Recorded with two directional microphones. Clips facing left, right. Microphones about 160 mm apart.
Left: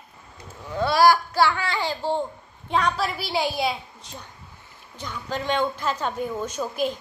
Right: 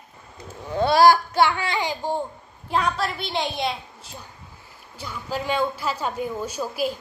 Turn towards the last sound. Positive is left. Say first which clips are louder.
# even
turn(degrees=-5)  # may be behind; listen again after turning